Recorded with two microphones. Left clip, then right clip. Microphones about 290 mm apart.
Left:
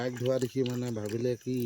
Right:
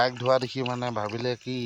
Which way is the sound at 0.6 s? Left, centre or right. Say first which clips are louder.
Right 1 dB; right.